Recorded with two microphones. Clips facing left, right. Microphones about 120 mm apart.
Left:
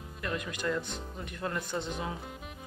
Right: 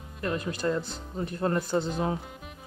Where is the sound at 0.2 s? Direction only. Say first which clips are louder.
Right 5 dB; 35° right (ahead or behind).